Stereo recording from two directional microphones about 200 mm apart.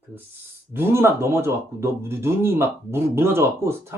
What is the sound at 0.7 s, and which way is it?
Speech, 10° right (ahead or behind).